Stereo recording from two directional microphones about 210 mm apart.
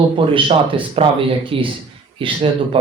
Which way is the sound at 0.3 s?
25° right (ahead or behind).